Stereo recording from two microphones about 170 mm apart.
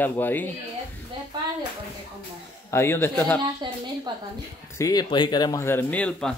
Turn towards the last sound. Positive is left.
turn(degrees=5)  # may be behind; listen again after turning